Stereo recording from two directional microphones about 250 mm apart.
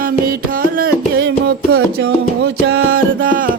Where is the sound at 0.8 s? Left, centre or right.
Right.